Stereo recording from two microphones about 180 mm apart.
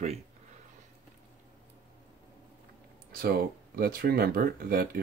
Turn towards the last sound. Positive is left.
turn(degrees=-55)  # may be behind; listen again after turning